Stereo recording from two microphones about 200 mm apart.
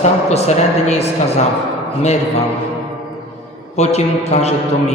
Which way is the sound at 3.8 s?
35° left (ahead or behind).